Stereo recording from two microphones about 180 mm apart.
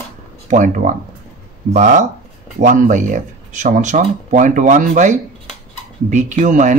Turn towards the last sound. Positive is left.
turn(degrees=-45)  # may be behind; listen again after turning